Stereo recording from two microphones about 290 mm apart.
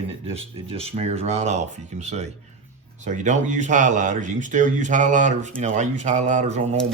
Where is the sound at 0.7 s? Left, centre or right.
Centre.